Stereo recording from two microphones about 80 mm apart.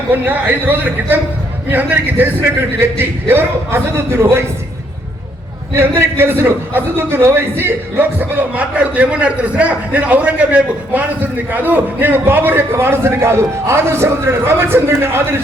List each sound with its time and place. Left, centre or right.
0.1 s a man's voice: right
5.7 s a man's voice: right